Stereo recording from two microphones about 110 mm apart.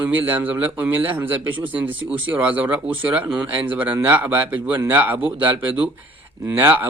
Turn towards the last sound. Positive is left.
turn(degrees=-15)  # may be behind; listen again after turning